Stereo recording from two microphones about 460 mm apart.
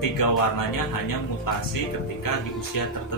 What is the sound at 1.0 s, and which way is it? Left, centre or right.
Speech, left.